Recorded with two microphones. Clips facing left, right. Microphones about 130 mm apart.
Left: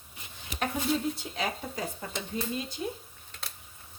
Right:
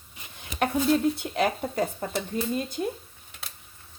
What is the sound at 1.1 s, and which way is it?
Speech, 60° right (ahead or behind).